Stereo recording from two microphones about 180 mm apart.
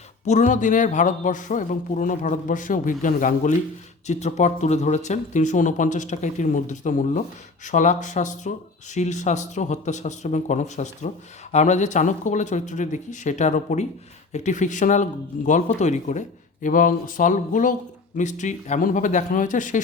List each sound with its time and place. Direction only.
0.3 s speech: 45° left (ahead or behind)